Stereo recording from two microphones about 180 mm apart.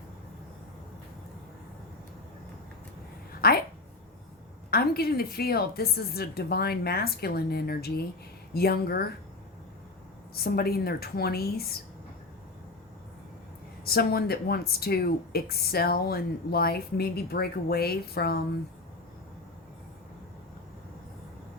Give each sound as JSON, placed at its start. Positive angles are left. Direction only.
{"t": 3.4, "sound": "a woman's voice", "side_deg": 55}
{"t": 4.7, "sound": "speech", "side_deg": 60}
{"t": 10.3, "sound": "speech", "side_deg": 60}
{"t": 13.8, "sound": "speech", "side_deg": 60}